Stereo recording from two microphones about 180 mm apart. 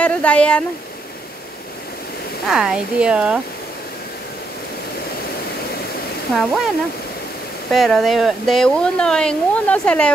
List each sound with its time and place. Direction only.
0.0 s speech: 5° left (ahead or behind)
2.4 s speech: 5° right (ahead or behind)
6.3 s speech: centre (ahead or behind)
7.7 s speech: centre (ahead or behind)